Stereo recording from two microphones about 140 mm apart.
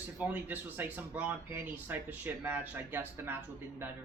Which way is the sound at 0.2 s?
15° right (ahead or behind).